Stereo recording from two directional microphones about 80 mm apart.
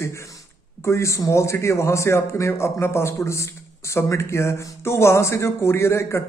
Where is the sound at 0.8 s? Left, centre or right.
Left.